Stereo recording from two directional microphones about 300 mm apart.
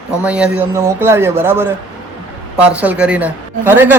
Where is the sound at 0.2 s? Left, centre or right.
Centre.